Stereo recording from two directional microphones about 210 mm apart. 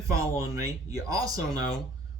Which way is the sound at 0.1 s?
15° right (ahead or behind).